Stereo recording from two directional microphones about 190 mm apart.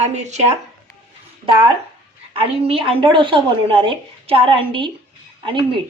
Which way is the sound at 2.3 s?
30° right (ahead or behind).